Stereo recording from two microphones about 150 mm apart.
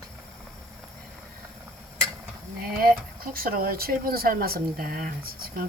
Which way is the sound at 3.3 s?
75° right (ahead or behind).